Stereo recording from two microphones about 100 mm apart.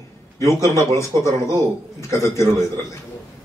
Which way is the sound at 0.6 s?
30° left (ahead or behind).